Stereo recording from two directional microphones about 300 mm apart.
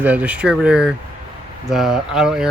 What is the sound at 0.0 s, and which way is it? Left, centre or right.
Speech, centre.